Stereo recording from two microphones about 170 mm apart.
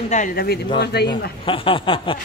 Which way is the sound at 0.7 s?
75° left (ahead or behind).